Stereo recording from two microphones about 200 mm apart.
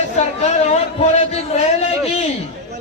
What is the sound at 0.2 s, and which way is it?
A man's voice, 35° left (ahead or behind).